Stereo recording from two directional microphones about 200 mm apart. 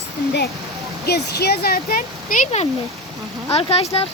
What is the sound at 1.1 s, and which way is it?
Speech, 55° left (ahead or behind).